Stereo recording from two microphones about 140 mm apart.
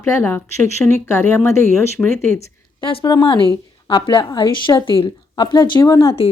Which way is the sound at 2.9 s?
35° left (ahead or behind).